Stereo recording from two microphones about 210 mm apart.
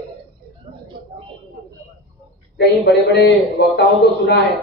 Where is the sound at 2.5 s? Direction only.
55° left (ahead or behind).